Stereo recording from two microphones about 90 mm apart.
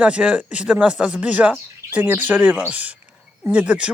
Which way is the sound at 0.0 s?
10° right (ahead or behind).